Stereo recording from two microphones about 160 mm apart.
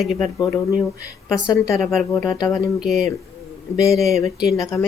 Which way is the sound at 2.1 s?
20° left (ahead or behind).